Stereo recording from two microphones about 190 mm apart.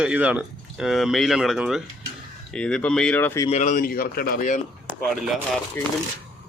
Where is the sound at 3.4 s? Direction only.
35° left (ahead or behind).